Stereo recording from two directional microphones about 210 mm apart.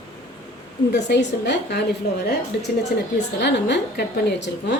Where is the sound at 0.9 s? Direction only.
55° left (ahead or behind).